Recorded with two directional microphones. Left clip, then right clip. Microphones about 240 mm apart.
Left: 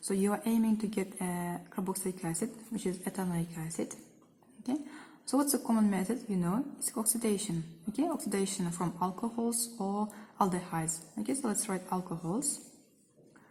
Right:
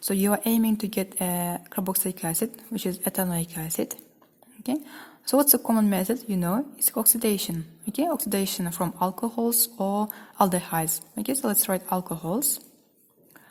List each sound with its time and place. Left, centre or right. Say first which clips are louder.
0.0 s a woman's voice: right 7 dB; right